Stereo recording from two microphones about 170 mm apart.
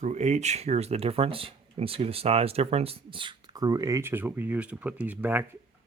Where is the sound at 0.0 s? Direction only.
45° right (ahead or behind).